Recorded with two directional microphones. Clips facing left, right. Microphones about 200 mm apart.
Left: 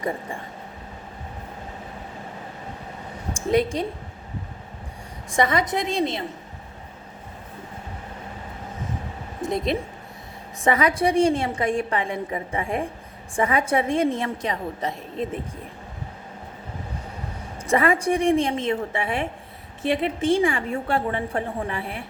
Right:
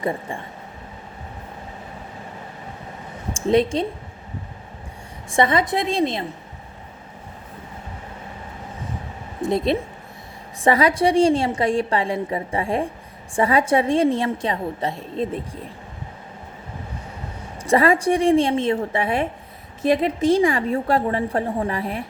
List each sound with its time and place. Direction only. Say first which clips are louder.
3.3 s a woman's voice: right 3 dB; 30° right (ahead or behind)
5.4 s a woman's voice: right 3 dB; 30° right (ahead or behind)
10.6 s a woman's voice: right 3 dB; 35° right (ahead or behind)
17.7 s a woman's voice: right 3 dB; 35° right (ahead or behind)